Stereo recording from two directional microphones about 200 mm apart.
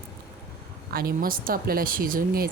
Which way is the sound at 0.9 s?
45° right (ahead or behind).